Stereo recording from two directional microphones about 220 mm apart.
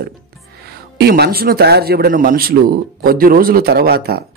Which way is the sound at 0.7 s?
45° right (ahead or behind).